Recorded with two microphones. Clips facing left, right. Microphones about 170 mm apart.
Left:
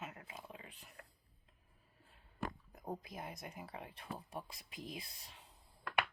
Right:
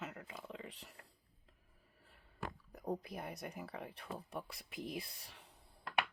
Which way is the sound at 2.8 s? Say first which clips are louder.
Right 4 dB; 65° right (ahead or behind).